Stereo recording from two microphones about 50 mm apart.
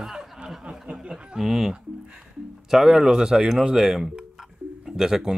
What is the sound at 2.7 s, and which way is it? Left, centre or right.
Speech, centre.